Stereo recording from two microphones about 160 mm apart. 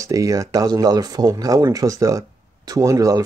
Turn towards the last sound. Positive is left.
turn(degrees=-20)  # may be behind; listen again after turning